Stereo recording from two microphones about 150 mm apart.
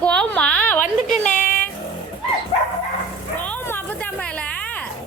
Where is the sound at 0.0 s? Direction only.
10° left (ahead or behind).